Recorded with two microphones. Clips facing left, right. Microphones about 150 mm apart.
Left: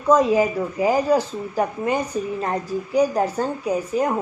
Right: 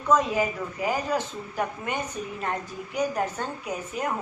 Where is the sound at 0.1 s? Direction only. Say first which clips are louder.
Left 7 dB; 35° left (ahead or behind).